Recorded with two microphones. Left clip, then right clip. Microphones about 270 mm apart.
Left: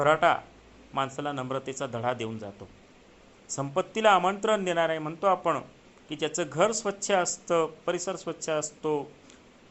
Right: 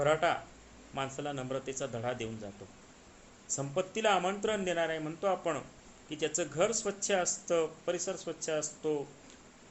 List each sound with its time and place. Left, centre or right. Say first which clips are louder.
0.0 s speech: left 6 dB; left
3.5 s speech: left 5 dB; left